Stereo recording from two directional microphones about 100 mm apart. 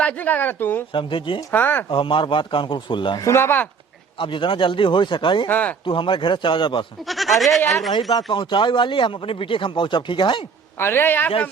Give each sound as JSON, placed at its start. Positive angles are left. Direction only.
{"t": 0.0, "sound": "speech", "side_deg": 15}
{"t": 0.9, "sound": "a man's voice", "side_deg": 55}
{"t": 1.5, "sound": "a man's voice", "side_deg": 20}
{"t": 1.9, "sound": "a man's voice", "side_deg": 60}
{"t": 3.2, "sound": "a man's voice", "side_deg": 30}
{"t": 4.2, "sound": "a man's voice", "side_deg": 60}
{"t": 5.5, "sound": "speech", "side_deg": 15}
{"t": 5.8, "sound": "a man's voice", "side_deg": 55}
{"t": 7.1, "sound": "speech", "side_deg": 0}
{"t": 8.1, "sound": "speech", "side_deg": 50}
{"t": 10.8, "sound": "a man's voice", "side_deg": 20}